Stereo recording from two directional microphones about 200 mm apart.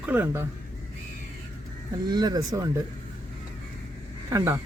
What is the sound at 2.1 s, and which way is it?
Speech, 20° right (ahead or behind).